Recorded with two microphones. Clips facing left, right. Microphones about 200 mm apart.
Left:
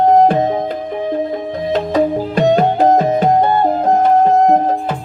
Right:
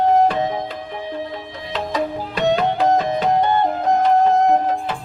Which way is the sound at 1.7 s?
45° left (ahead or behind).